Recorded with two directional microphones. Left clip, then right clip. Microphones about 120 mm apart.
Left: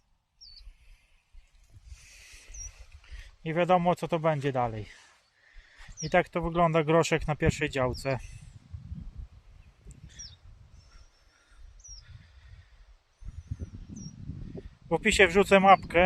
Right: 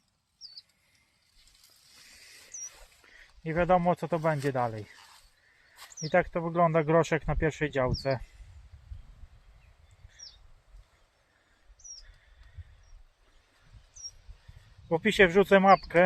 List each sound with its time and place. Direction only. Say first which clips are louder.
3.0 s a sound: left 2 dB; 35° left (ahead or behind)
3.4 s speech: even; 50° left (ahead or behind)
5.9 s speech: even; 60° left (ahead or behind)
6.2 s speech: even; 45° left (ahead or behind)
14.8 s speech: left 1 dB; 30° left (ahead or behind)